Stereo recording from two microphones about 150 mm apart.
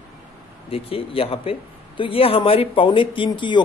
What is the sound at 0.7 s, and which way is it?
A man's voice, 40° left (ahead or behind).